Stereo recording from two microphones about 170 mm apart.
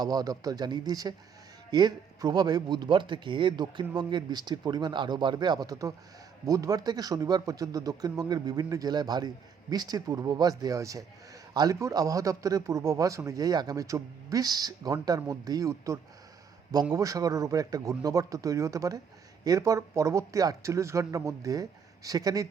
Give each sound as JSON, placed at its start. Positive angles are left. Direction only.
{"t": 0.0, "sound": "speech", "side_deg": -20}